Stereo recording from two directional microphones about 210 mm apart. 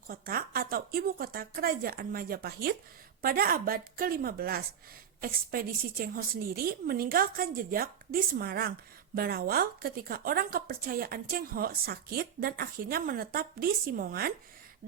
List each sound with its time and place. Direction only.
0.1 s a woman's voice: 45° right (ahead or behind)